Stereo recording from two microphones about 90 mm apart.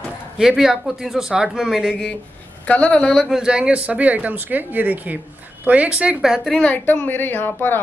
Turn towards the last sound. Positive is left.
turn(degrees=20)  # may be behind; listen again after turning